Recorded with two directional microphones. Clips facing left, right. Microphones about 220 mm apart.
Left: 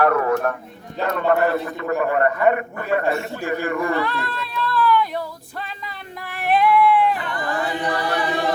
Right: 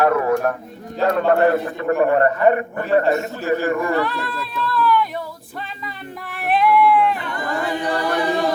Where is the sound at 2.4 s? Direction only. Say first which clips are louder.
Right 2 dB; 40° right (ahead or behind).